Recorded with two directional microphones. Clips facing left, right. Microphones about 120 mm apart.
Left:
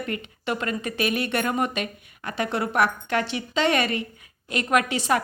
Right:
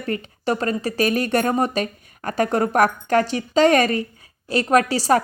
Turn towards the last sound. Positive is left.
turn(degrees=-35)  # may be behind; listen again after turning